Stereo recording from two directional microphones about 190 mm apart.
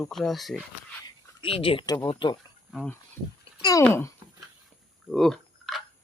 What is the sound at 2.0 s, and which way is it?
Speech, 25° left (ahead or behind).